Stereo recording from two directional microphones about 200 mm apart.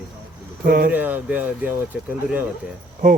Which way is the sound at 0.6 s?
50° right (ahead or behind).